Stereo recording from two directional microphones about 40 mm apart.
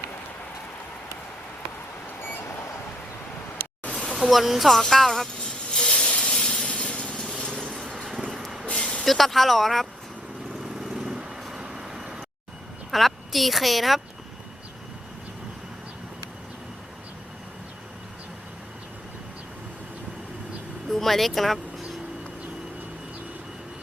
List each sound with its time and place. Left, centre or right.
2.0 s vehicle: left
3.8 s a sound: left
4.2 s speech: centre
4.8 s a sound: centre; by 6.3 s left
6.3 s a sound: left
8.4 s vehicle: centre
8.6 s vehicle: left
9.0 s speech: centre
10.5 s vehicle: centre
12.9 s speech: centre
20.9 s speech: centre